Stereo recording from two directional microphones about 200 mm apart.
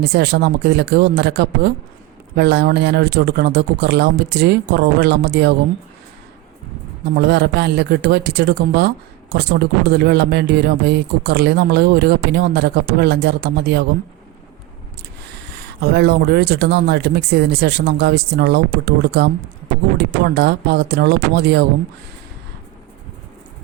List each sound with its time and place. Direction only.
0.0 s speech: 55° right (ahead or behind)
7.2 s speech: 55° right (ahead or behind)
15.2 s speech: 55° right (ahead or behind)